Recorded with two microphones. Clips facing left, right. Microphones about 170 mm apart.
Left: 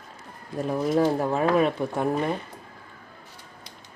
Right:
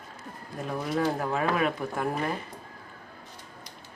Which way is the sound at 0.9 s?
30° left (ahead or behind).